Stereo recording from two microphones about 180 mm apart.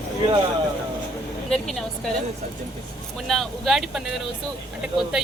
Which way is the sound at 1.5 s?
Centre (ahead or behind).